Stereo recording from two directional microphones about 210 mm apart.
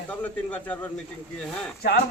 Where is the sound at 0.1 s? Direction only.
5° left (ahead or behind).